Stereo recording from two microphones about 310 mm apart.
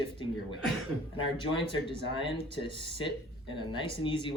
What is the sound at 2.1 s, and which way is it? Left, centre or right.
Speech, centre.